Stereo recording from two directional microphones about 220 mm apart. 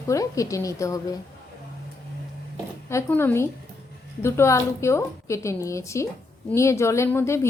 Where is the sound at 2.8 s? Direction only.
10° left (ahead or behind).